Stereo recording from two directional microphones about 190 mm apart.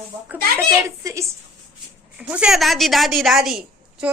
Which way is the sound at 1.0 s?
15° right (ahead or behind).